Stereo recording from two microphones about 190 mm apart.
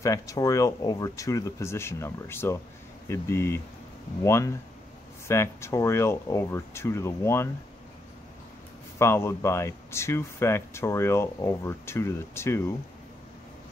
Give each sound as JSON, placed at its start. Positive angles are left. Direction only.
{"t": 0.0, "sound": "speech", "side_deg": 15}
{"t": 8.9, "sound": "speech", "side_deg": 15}